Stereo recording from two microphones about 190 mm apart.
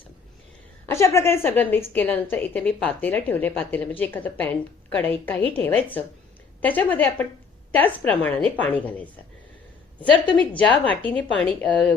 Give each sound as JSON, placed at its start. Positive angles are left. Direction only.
{"t": 0.9, "sound": "a woman's voice", "side_deg": 15}
{"t": 10.6, "sound": "a woman's voice", "side_deg": 5}